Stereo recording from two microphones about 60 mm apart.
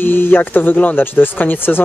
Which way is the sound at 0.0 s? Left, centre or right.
Left.